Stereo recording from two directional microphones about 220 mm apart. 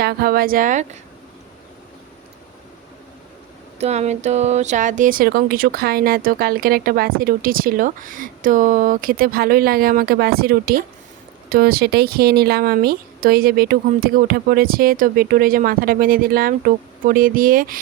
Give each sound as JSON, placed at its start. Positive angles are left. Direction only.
{"t": 0.0, "sound": "speech", "side_deg": -45}
{"t": 3.8, "sound": "speech", "side_deg": -30}